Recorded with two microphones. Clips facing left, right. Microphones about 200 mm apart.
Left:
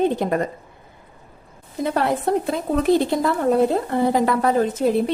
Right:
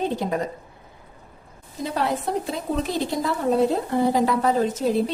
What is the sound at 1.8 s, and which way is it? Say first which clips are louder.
Speech: left 4 dB; 55° left (ahead or behind).